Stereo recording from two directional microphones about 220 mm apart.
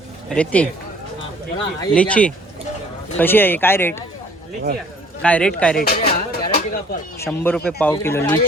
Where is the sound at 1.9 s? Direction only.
5° left (ahead or behind).